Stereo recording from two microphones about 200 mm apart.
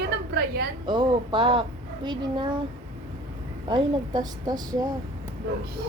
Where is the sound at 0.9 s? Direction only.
20° right (ahead or behind).